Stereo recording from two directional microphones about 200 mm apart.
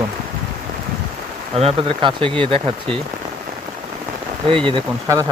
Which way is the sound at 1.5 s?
30° right (ahead or behind).